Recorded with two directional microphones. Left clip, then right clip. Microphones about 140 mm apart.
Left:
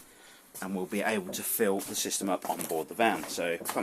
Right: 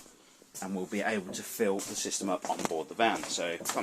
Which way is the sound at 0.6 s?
10° left (ahead or behind).